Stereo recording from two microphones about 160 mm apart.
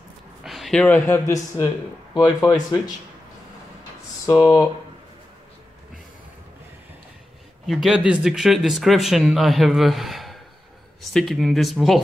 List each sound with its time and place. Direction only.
0.4 s a man's voice: centre (ahead or behind); by 2.8 s 25° left (ahead or behind)
4.3 s speech: 20° left (ahead or behind)
7.6 s speech: centre (ahead or behind)